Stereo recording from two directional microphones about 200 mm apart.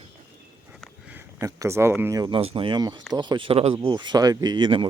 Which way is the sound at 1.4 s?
15° right (ahead or behind).